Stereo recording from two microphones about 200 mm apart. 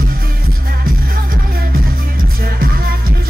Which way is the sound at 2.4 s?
45° right (ahead or behind).